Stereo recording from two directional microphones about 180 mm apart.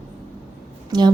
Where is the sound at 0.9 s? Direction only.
25° right (ahead or behind).